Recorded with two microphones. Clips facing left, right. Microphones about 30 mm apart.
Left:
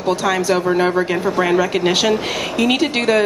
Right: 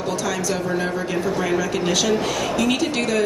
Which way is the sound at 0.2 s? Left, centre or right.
Left.